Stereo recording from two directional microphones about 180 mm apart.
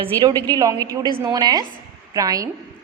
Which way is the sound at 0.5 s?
20° right (ahead or behind).